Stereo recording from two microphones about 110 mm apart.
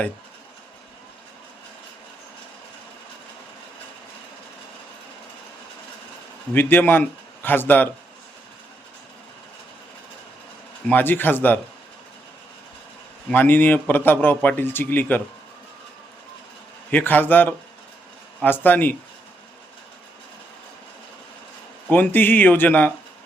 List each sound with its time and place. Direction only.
6.5 s a man's voice: 15° left (ahead or behind)
10.8 s a man's voice: 15° left (ahead or behind)
13.3 s a man's voice: 15° left (ahead or behind)
16.9 s a man's voice: 15° left (ahead or behind)
21.8 s a man's voice: 15° left (ahead or behind)